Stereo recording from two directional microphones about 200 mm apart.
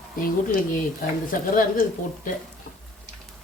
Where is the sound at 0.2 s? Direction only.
45° left (ahead or behind).